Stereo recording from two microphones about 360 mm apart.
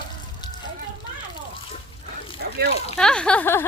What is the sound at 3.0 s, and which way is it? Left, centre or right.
Speech, centre.